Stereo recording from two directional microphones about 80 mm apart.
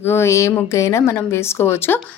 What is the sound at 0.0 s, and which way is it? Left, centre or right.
A woman's voice, left.